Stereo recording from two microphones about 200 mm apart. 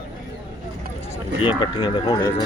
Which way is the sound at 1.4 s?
25° left (ahead or behind).